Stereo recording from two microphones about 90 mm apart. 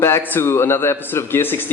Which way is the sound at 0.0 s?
25° left (ahead or behind).